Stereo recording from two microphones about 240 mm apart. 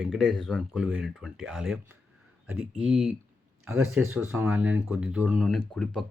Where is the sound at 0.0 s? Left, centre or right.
Centre.